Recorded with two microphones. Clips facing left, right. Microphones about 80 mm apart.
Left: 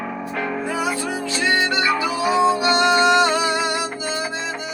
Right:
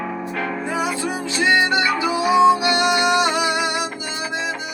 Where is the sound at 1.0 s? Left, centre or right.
Right.